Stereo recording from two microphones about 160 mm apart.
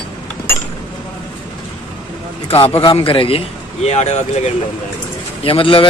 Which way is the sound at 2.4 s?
35° left (ahead or behind).